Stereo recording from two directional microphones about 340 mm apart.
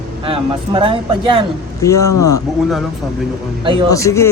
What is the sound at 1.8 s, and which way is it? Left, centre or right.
Speech, centre.